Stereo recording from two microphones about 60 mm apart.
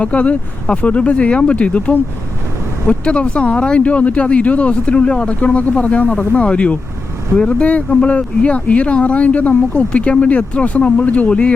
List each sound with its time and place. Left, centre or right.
0.0 s speech: left
3.0 s speech: centre